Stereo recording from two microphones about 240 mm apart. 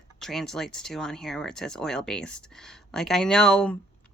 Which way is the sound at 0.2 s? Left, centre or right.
Centre.